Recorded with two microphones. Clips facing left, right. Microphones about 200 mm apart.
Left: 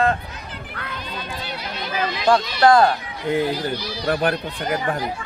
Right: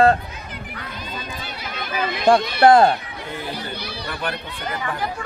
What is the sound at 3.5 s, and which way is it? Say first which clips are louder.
Speech: left 5 dB; 60° right (ahead or behind).